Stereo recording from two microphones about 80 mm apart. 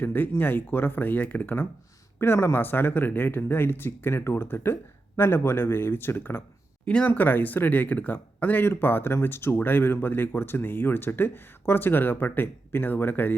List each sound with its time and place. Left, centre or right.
0.0 s speech: left
6.8 s speech: centre
7.1 s speech: left